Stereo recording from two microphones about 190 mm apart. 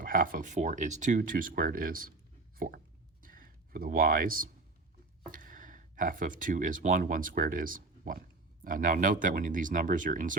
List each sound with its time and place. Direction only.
0.0 s speech: 45° right (ahead or behind)
2.6 s a sound: 50° right (ahead or behind)
5.3 s speech: 45° right (ahead or behind)